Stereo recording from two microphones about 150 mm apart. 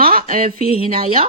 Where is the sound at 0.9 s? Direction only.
40° right (ahead or behind).